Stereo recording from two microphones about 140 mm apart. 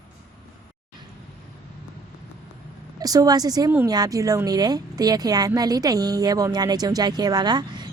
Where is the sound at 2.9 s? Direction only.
25° right (ahead or behind).